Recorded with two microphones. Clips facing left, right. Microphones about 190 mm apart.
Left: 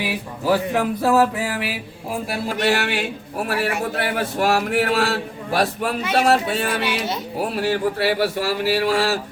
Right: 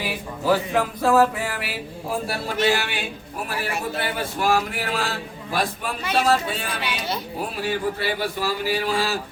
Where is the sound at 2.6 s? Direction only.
65° left (ahead or behind).